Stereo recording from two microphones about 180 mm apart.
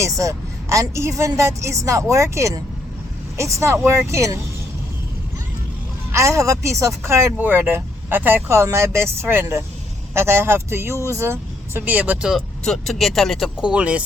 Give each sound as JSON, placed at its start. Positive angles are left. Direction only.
{"t": 0.0, "sound": "speech", "side_deg": -15}
{"t": 6.1, "sound": "speech", "side_deg": -15}